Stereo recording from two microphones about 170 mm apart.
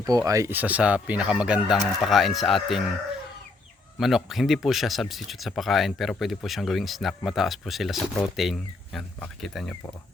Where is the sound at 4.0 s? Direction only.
Centre (ahead or behind).